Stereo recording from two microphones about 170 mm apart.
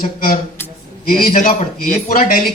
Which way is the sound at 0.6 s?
10° left (ahead or behind).